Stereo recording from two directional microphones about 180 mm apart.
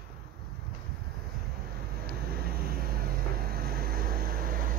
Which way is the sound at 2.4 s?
55° right (ahead or behind).